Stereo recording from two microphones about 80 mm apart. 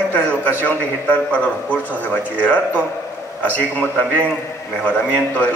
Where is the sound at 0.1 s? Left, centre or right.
Left.